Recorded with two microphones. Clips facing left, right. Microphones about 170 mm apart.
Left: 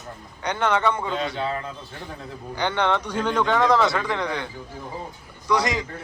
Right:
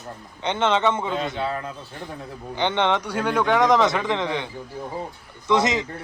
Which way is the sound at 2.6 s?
20° right (ahead or behind).